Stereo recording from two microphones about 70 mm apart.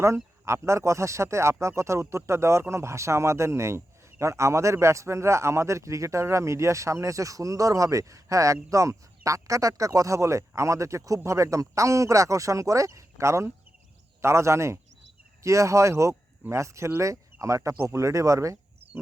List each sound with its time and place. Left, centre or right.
0.0 s speech: right